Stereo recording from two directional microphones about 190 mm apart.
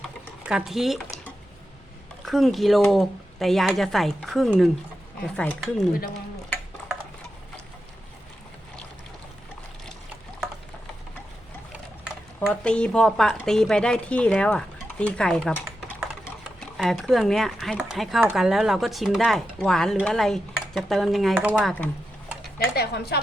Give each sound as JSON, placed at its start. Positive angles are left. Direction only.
{"t": 0.4, "sound": "speech", "side_deg": -5}
{"t": 2.2, "sound": "speech", "side_deg": 0}
{"t": 12.5, "sound": "speech", "side_deg": 5}
{"t": 16.0, "sound": "typing", "side_deg": 0}
{"t": 18.3, "sound": "speech", "side_deg": 0}
{"t": 22.5, "sound": "speech", "side_deg": 55}